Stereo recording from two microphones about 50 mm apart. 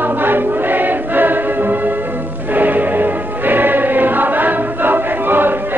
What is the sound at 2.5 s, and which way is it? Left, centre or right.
Music, right.